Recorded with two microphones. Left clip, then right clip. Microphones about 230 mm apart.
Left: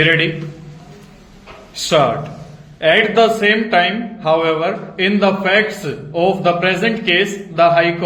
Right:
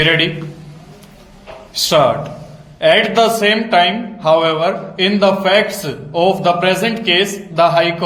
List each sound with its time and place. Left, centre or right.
0.0 s speech: right
2.8 s speech: right